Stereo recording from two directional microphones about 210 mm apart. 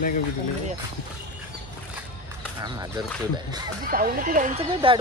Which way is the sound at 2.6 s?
20° right (ahead or behind).